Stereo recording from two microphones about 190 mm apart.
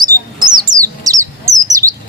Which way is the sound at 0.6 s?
20° right (ahead or behind).